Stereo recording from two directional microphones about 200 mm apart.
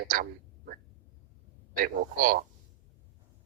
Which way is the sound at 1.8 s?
45° right (ahead or behind).